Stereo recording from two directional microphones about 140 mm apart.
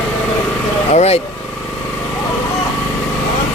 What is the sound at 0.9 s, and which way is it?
Vehicle, 50° left (ahead or behind).